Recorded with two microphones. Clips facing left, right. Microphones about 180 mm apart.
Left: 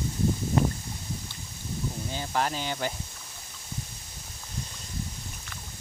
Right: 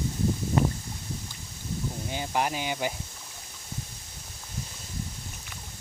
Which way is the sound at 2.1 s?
15° right (ahead or behind).